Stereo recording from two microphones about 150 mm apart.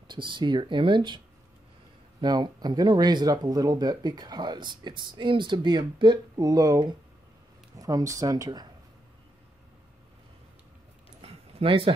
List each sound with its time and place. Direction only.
0.1 s speech: 30° right (ahead or behind)
2.2 s speech: 30° right (ahead or behind)
11.1 s a sound: 35° right (ahead or behind)